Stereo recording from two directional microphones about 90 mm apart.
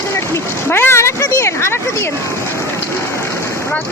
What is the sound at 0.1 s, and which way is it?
Speech, 30° left (ahead or behind).